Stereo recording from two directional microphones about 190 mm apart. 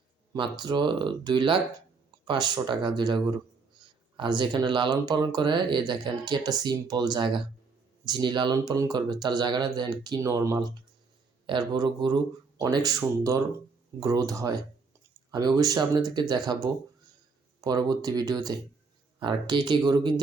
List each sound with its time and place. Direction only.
0.3 s speech: 20° right (ahead or behind)